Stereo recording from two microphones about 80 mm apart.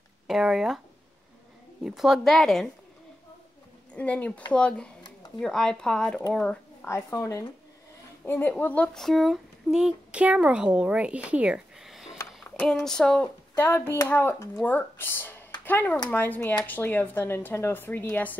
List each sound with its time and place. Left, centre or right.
0.3 s a woman's voice: centre
1.8 s a woman's voice: centre
3.9 s speech: centre
6.8 s speech: left
8.3 s speech: left
8.9 s speech: centre
11.8 s a sound: centre
12.8 s speech: centre
13.6 s speech: left